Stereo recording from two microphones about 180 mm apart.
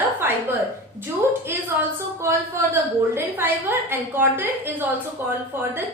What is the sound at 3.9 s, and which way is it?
A woman's voice, 10° right (ahead or behind).